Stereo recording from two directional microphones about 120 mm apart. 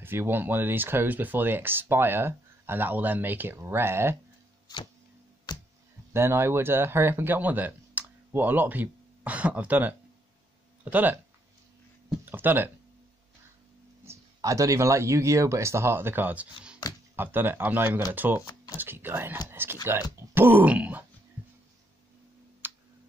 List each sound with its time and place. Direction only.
0.0 s speech: 15° right (ahead or behind)
6.1 s speech: 20° right (ahead or behind)
12.3 s speech: 15° right (ahead or behind)
14.1 s a sound: 25° right (ahead or behind)
14.4 s speech: 25° right (ahead or behind); by 21.0 s 10° right (ahead or behind)
22.6 s clicking: 15° right (ahead or behind)